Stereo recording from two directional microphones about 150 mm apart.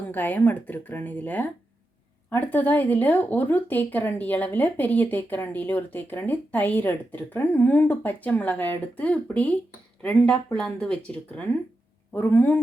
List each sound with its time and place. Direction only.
0.0 s speech: 10° left (ahead or behind)